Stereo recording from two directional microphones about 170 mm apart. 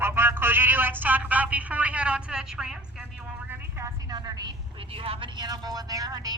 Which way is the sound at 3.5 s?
15° right (ahead or behind).